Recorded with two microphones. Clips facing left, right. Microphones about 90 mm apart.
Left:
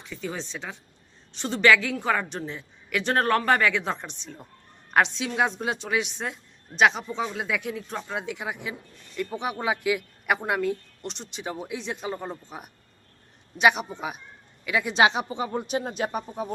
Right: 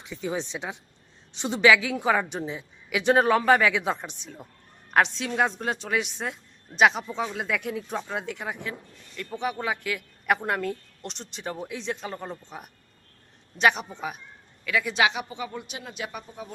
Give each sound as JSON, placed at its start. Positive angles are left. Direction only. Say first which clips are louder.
{"t": 0.0, "sound": "a woman's voice", "louder": "right 3 dB", "side_deg": -15}
{"t": 10.2, "sound": "a woman's voice", "louder": "even", "side_deg": 5}